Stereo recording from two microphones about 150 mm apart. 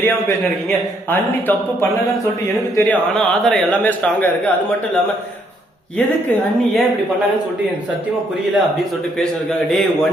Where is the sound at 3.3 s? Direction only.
Centre (ahead or behind).